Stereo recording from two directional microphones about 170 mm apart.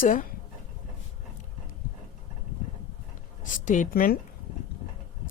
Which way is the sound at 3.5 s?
50° left (ahead or behind).